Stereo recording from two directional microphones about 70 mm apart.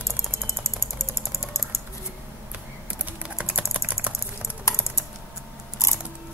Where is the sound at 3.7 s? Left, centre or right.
Right.